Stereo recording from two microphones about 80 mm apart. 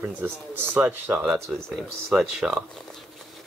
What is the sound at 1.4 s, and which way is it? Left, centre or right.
Speech, centre.